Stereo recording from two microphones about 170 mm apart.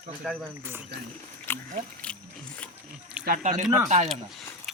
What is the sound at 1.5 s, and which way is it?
Biting, 10° left (ahead or behind).